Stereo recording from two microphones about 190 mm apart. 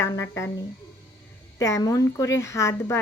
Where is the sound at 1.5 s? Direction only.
15° left (ahead or behind).